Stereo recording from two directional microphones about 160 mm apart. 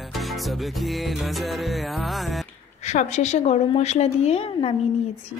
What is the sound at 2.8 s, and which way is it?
A woman's voice, 45° left (ahead or behind).